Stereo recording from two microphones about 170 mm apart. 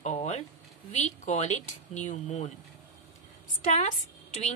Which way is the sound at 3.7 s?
40° left (ahead or behind).